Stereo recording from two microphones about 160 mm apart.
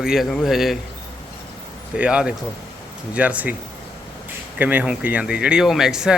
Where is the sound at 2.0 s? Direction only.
5° right (ahead or behind).